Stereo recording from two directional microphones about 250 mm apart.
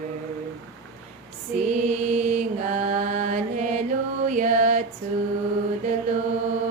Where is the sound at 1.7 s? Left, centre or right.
Right.